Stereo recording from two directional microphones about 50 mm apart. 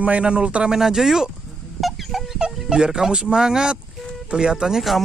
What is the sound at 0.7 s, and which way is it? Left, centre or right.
Speech, centre.